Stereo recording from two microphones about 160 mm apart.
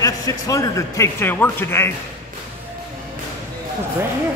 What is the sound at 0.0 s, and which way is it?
Speech, 20° left (ahead or behind).